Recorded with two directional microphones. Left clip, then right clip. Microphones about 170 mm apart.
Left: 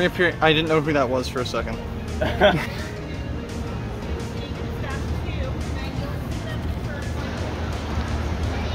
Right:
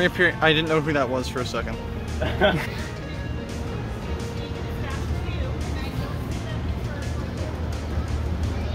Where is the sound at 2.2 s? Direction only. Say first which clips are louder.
Left 3 dB; 60° left (ahead or behind).